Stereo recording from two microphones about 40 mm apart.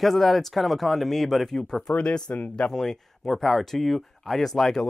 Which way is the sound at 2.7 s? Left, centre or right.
Centre.